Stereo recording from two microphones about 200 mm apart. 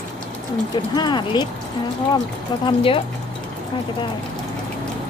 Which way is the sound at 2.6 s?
25° left (ahead or behind).